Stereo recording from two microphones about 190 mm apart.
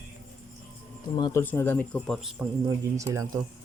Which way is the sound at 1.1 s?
20° left (ahead or behind).